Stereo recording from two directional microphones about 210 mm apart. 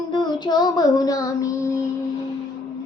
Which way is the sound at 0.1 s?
20° left (ahead or behind).